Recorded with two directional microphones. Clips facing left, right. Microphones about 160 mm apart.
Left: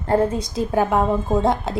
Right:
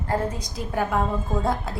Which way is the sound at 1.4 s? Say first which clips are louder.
Left 5 dB; 80° left.